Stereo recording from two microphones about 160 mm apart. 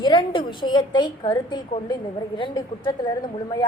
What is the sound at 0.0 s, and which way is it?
A woman's voice, 30° left (ahead or behind).